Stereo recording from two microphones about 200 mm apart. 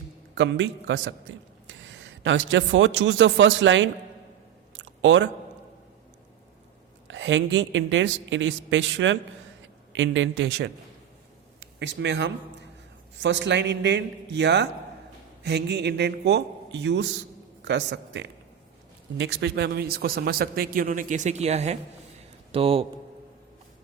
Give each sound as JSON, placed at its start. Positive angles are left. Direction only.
{"t": 0.3, "sound": "a man's voice", "side_deg": -65}
{"t": 4.8, "sound": "a sound", "side_deg": -65}
{"t": 7.1, "sound": "a woman's voice", "side_deg": -65}